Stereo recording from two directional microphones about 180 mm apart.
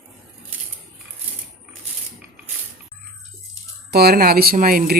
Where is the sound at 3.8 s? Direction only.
60° right (ahead or behind).